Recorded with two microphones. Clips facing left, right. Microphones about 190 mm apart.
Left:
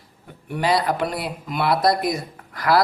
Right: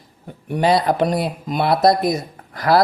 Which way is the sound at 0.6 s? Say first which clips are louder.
Right 4 dB; 25° right (ahead or behind).